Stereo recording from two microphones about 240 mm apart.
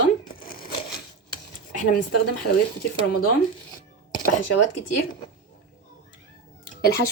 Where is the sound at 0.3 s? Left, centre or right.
Left.